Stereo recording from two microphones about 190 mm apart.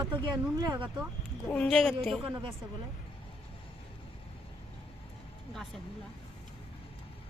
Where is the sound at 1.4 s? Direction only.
5° left (ahead or behind).